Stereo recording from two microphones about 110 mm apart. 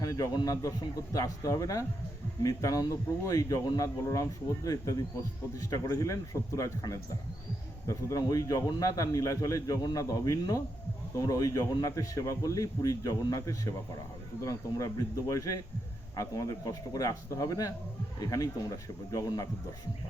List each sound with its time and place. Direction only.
0.0 s a man's voice: 30° left (ahead or behind)